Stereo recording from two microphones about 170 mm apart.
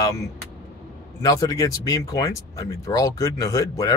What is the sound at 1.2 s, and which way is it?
Speech, 20° left (ahead or behind).